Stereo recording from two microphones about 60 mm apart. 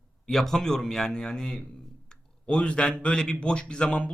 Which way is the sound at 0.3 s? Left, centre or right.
Centre.